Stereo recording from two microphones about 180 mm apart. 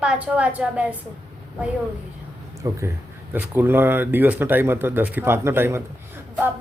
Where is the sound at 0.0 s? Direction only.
5° right (ahead or behind).